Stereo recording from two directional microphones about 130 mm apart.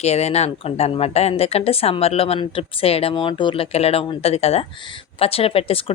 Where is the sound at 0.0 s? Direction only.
55° left (ahead or behind).